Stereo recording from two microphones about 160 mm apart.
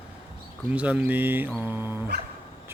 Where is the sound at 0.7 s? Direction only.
10° right (ahead or behind).